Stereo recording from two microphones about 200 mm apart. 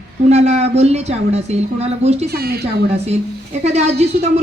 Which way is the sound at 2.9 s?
30° right (ahead or behind).